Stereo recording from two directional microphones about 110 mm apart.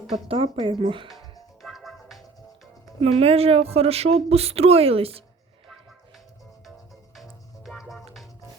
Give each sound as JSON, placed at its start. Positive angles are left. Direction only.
{"t": 0.3, "sound": "speech", "side_deg": -60}
{"t": 1.6, "sound": "music", "side_deg": 0}
{"t": 3.0, "sound": "speech", "side_deg": -65}
{"t": 7.6, "sound": "music", "side_deg": 0}